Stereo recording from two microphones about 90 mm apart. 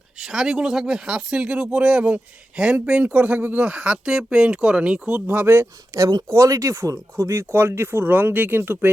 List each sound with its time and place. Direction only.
0.2 s speech: 5° right (ahead or behind); by 5.6 s 20° right (ahead or behind)
5.9 s speech: 40° right (ahead or behind); by 8.9 s 25° right (ahead or behind)